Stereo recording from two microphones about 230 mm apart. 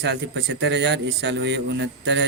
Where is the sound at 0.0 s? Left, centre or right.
Right.